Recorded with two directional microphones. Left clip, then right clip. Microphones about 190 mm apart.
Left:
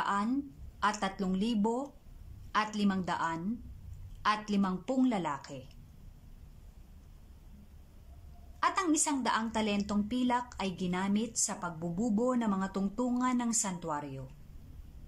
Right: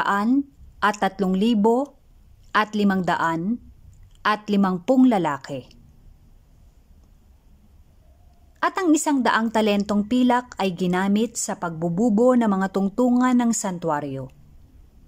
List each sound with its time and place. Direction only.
0.0 s a woman's voice: 50° right (ahead or behind)
8.5 s a woman's voice: 50° right (ahead or behind)